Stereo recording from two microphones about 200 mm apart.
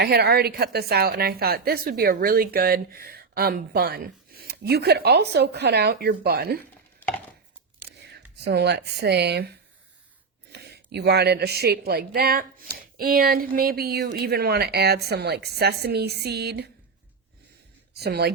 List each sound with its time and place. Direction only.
0.0 s a woman's voice: 55° right (ahead or behind)
7.9 s whispering: 55° right (ahead or behind)
8.4 s speech: 55° right (ahead or behind)
10.5 s a sound: 55° right (ahead or behind)
10.9 s a woman's voice: 55° right (ahead or behind)
17.9 s a woman's voice: 55° right (ahead or behind)